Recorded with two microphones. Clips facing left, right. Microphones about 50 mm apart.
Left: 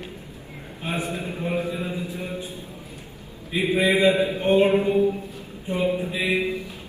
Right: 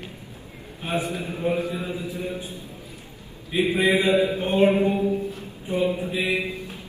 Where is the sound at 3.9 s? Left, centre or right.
Left.